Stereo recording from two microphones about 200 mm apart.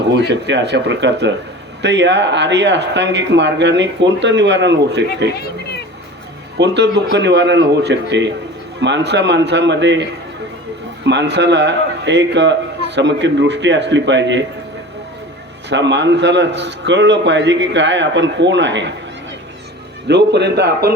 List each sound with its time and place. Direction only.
0.1 s a man's voice: 60° right (ahead or behind)
6.6 s a man's voice: 60° right (ahead or behind)
15.7 s a man's voice: 60° right (ahead or behind)
20.1 s a man's voice: 60° right (ahead or behind)